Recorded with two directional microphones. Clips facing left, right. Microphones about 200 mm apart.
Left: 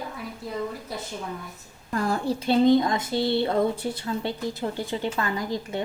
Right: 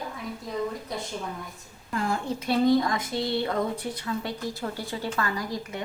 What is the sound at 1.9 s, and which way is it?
Speech, 40° left (ahead or behind).